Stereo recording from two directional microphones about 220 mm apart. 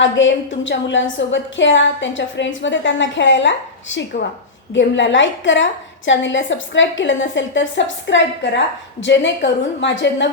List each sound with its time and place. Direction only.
0.0 s a woman's voice: 60° left (ahead or behind)